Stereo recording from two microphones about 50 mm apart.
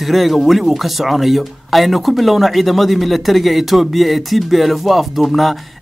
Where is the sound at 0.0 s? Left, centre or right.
Centre.